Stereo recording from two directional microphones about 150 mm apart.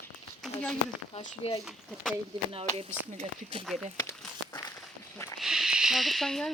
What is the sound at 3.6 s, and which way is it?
Speech, centre (ahead or behind).